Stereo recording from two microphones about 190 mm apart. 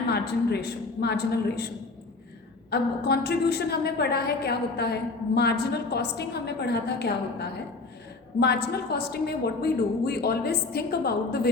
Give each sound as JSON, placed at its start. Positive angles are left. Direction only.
{"t": 0.1, "sound": "a woman's voice", "side_deg": 60}
{"t": 2.6, "sound": "a woman's voice", "side_deg": 60}